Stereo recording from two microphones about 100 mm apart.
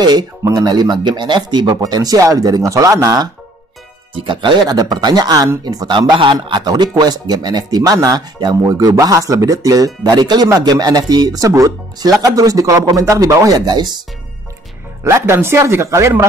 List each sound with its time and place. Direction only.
0.4 s speech: 40° right (ahead or behind)
4.1 s speech: 55° right (ahead or behind)
15.0 s speech: 25° right (ahead or behind)